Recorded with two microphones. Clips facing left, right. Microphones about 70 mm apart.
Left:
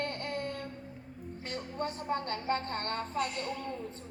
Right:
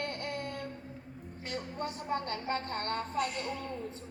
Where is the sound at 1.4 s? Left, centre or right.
Left.